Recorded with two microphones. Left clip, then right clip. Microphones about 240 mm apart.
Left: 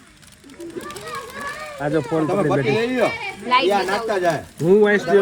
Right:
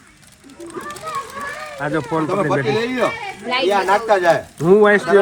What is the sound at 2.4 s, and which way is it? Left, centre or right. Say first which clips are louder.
Speech: right 1 dB; centre.